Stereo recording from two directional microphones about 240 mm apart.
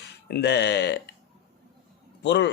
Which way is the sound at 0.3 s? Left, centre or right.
Left.